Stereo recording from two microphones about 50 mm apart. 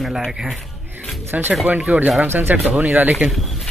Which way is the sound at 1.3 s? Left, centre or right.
Right.